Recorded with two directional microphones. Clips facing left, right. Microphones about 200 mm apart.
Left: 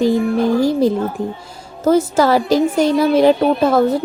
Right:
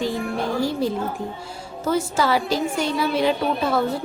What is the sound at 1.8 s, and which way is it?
A woman's voice, 40° left (ahead or behind).